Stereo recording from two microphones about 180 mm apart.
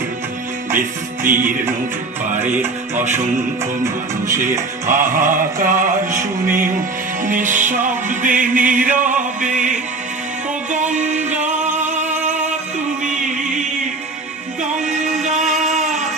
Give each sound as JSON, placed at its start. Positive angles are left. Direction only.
{"t": 0.8, "sound": "music", "side_deg": -50}
{"t": 2.4, "sound": "music", "side_deg": -10}
{"t": 2.9, "sound": "music", "side_deg": -40}
{"t": 4.3, "sound": "music", "side_deg": -45}